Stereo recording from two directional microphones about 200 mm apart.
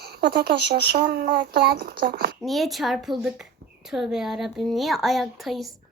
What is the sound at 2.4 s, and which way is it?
A woman's voice, centre (ahead or behind).